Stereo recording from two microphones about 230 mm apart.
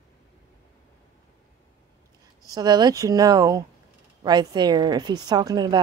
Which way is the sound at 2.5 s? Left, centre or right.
Centre.